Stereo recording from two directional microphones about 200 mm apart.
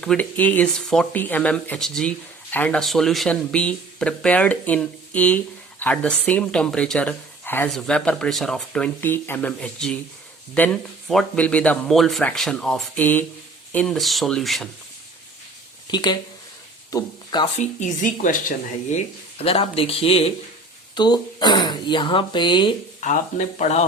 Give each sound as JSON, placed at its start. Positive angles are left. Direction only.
{"t": 0.0, "sound": "speech", "side_deg": 5}
{"t": 15.9, "sound": "speech", "side_deg": 20}
{"t": 17.6, "sound": "speech", "side_deg": 35}
{"t": 23.0, "sound": "speech", "side_deg": 40}